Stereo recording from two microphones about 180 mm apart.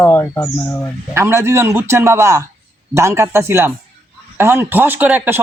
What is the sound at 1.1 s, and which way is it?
A man's voice, 15° right (ahead or behind).